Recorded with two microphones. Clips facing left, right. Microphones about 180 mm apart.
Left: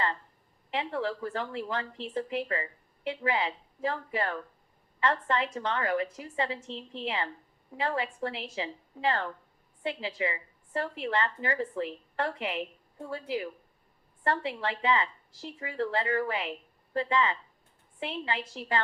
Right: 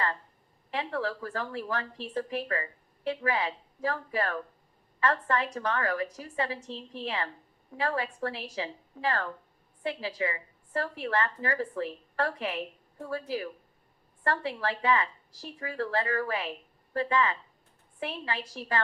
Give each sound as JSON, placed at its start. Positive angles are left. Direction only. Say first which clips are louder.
{"t": 0.7, "sound": "a woman's voice", "louder": "even", "side_deg": 25}